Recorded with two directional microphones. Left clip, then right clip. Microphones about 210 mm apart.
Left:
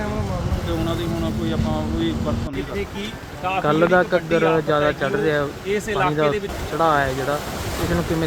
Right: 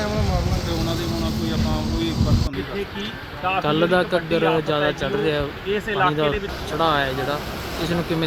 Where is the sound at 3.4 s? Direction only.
10° right (ahead or behind).